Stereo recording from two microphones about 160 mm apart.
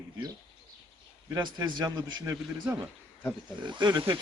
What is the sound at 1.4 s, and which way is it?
A man's voice, 25° right (ahead or behind).